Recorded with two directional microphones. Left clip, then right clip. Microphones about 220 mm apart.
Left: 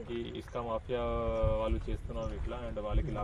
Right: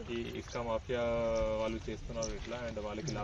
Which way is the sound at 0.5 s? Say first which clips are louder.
Even; 30° left (ahead or behind).